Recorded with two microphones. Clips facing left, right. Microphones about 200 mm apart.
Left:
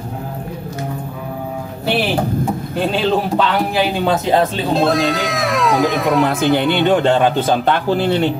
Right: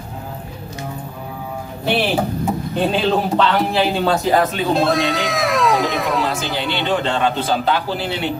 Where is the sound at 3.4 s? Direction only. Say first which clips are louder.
Even; 15° left (ahead or behind).